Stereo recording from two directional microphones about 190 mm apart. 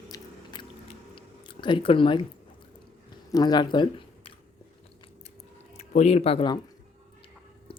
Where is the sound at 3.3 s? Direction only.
20° left (ahead or behind).